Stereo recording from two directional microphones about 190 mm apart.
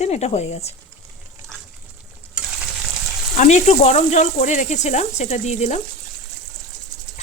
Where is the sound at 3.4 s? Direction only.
35° left (ahead or behind).